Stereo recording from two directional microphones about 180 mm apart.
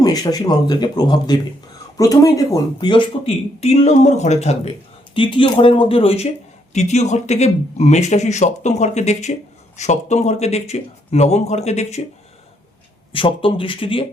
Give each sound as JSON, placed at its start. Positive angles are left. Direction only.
{"t": 0.0, "sound": "speech", "side_deg": 20}
{"t": 13.1, "sound": "speech", "side_deg": 30}